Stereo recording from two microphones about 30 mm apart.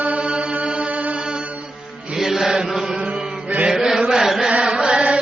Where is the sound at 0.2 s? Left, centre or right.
Right.